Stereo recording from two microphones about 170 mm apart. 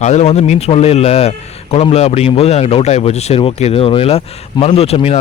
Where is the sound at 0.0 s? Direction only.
45° left (ahead or behind).